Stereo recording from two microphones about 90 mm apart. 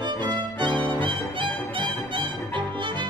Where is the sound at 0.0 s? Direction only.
55° right (ahead or behind).